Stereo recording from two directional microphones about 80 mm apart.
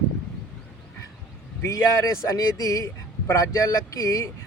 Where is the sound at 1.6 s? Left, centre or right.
Left.